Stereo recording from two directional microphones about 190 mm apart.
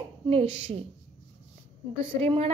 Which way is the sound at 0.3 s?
30° right (ahead or behind).